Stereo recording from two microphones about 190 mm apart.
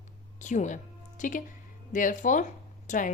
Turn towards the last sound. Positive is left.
turn(degrees=45)  # may be behind; listen again after turning